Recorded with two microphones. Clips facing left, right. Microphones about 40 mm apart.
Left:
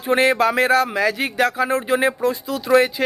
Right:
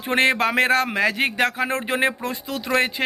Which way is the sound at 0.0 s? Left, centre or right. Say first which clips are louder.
Left 3 dB; right.